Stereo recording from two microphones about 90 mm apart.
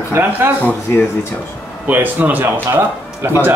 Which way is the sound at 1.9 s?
20° right (ahead or behind).